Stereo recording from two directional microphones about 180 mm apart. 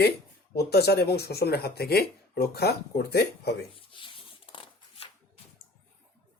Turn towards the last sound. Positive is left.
turn(degrees=30)  # may be behind; listen again after turning